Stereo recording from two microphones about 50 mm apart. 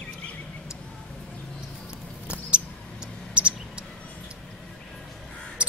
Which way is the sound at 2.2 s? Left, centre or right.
Right.